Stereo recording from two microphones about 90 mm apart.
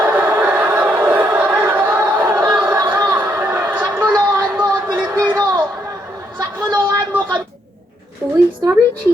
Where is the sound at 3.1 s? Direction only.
25° right (ahead or behind).